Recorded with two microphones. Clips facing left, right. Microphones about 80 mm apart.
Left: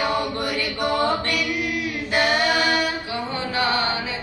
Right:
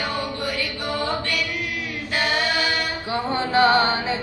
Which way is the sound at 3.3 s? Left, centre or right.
Right.